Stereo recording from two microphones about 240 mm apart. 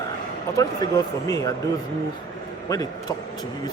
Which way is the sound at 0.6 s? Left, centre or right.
Centre.